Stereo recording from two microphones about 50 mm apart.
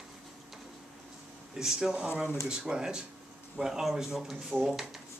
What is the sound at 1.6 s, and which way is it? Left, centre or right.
Speech, centre.